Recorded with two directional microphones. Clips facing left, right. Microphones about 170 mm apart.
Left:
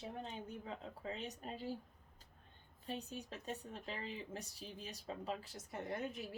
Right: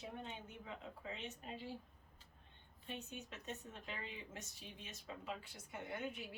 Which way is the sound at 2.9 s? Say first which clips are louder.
Left 4 dB; 35° left (ahead or behind).